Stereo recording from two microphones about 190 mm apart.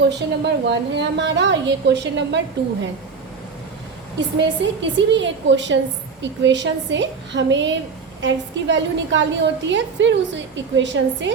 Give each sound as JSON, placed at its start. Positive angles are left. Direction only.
{"t": 0.0, "sound": "a woman's voice", "side_deg": -65}
{"t": 4.4, "sound": "a woman's voice", "side_deg": -70}